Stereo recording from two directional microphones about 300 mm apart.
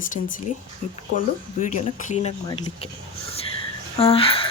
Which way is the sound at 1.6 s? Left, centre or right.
Left.